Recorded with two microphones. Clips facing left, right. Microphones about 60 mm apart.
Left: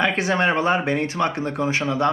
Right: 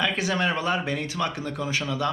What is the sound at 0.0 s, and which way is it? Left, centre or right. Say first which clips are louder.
Speech: left 5 dB; left.